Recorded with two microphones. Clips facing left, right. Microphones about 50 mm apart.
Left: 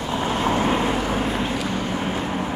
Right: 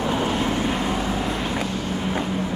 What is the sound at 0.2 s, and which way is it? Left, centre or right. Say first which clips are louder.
Vehicle: left 1 dB; left.